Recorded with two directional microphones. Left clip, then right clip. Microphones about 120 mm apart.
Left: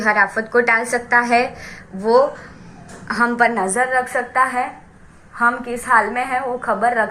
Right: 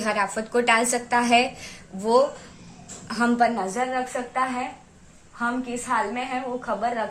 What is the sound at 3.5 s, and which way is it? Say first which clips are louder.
A woman's voice: left 8 dB; 15° left (ahead or behind).